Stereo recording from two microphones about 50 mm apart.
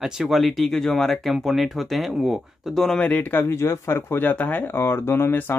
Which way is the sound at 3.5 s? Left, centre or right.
Left.